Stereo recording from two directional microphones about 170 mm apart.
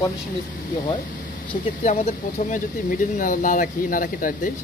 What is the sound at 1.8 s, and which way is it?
Speech, 40° left (ahead or behind).